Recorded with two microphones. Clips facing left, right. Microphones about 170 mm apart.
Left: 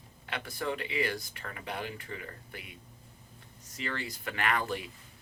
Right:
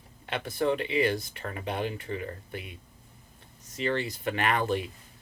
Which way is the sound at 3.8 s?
25° right (ahead or behind).